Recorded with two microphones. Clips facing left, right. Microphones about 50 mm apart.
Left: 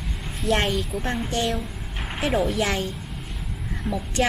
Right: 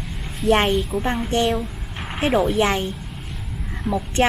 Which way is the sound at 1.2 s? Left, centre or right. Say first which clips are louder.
Right 5 dB; right.